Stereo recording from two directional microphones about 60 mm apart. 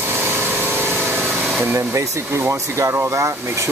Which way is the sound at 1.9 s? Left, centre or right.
Right.